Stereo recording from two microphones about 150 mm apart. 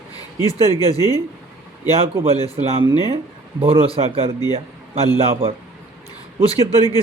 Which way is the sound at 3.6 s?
40° right (ahead or behind).